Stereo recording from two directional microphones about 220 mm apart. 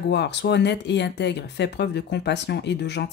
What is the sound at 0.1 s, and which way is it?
Speech, 50° left (ahead or behind).